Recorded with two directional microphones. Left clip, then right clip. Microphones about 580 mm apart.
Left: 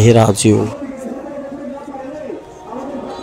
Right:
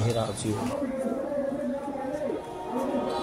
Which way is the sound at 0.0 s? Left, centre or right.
Centre.